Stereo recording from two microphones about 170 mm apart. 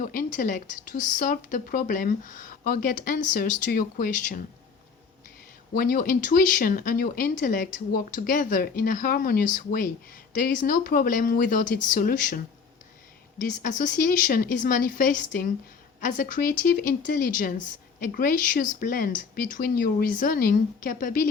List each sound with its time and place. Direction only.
0.0 s speech: 50° left (ahead or behind)
5.7 s speech: 55° left (ahead or behind)
13.4 s speech: 50° left (ahead or behind)